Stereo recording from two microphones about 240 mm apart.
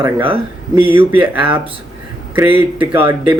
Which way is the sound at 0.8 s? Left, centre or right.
Centre.